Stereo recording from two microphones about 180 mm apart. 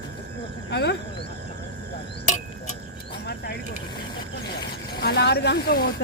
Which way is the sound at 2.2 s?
40° left (ahead or behind).